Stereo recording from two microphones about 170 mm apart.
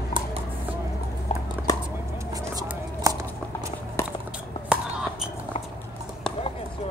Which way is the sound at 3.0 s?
20° right (ahead or behind).